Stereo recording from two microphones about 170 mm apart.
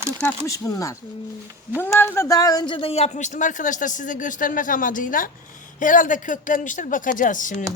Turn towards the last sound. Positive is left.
turn(degrees=50)  # may be behind; listen again after turning